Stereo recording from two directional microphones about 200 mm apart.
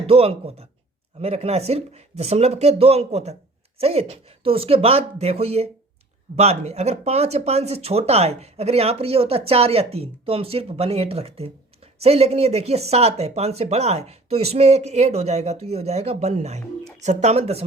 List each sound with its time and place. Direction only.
0.1 s speech: 30° right (ahead or behind)